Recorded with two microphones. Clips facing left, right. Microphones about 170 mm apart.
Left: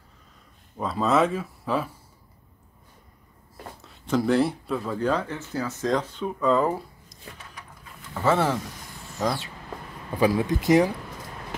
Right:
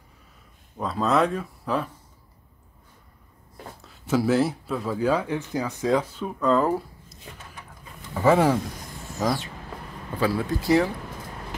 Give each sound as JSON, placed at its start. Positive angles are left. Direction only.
{"t": 0.7, "sound": "speech", "side_deg": 0}
{"t": 3.8, "sound": "speech", "side_deg": -5}
{"t": 8.1, "sound": "speech", "side_deg": -15}
{"t": 10.1, "sound": "speech", "side_deg": 15}